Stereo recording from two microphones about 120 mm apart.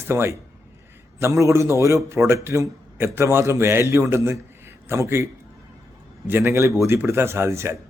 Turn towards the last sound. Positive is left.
turn(degrees=-20)  # may be behind; listen again after turning